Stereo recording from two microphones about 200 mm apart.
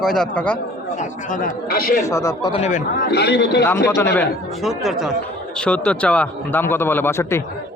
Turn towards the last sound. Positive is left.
turn(degrees=15)  # may be behind; listen again after turning